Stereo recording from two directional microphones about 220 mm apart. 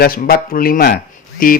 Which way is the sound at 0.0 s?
40° left (ahead or behind).